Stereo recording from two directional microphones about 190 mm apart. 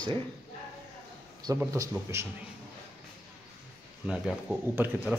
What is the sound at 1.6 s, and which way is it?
Speech, 15° right (ahead or behind).